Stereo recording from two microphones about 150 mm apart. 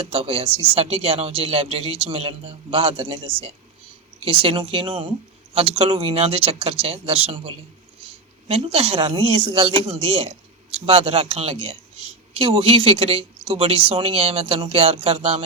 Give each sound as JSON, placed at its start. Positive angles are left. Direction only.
{"t": 0.0, "sound": "speech", "side_deg": -40}